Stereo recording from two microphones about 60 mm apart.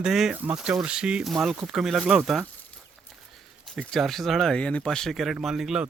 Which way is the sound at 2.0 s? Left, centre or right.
Right.